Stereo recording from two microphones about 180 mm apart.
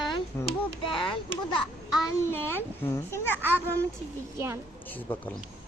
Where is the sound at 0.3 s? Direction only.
15° left (ahead or behind).